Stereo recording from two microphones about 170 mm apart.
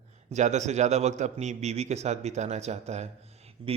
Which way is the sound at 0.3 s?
45° right (ahead or behind).